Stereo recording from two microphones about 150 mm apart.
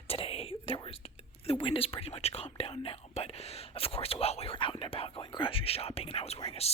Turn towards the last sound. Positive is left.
turn(degrees=40)  # may be behind; listen again after turning